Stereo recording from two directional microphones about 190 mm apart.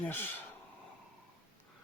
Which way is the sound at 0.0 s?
10° left (ahead or behind).